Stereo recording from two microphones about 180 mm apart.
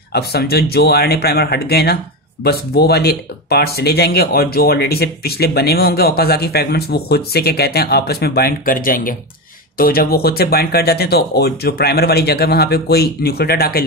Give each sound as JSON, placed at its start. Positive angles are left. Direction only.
{"t": 0.1, "sound": "speech", "side_deg": 60}